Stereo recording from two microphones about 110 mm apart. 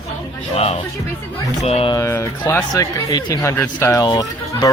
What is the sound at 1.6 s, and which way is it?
Speech, 65° left (ahead or behind).